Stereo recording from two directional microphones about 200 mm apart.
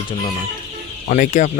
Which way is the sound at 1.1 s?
40° left (ahead or behind).